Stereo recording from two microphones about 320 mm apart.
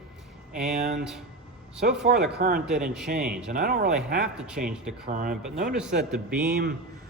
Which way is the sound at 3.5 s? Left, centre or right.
Right.